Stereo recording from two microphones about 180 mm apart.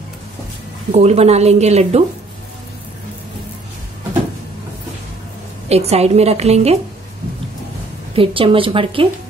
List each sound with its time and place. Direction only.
0.9 s a woman's voice: 35° right (ahead or behind)
5.7 s a woman's voice: 35° right (ahead or behind)
8.1 s a woman's voice: 30° right (ahead or behind)